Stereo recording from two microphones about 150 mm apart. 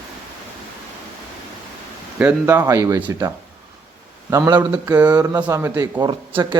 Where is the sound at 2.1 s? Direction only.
10° right (ahead or behind).